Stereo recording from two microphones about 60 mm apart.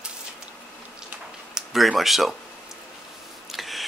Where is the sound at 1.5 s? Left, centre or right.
Centre.